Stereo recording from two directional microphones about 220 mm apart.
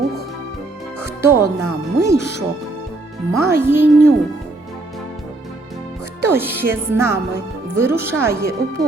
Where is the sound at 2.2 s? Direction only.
50° left (ahead or behind).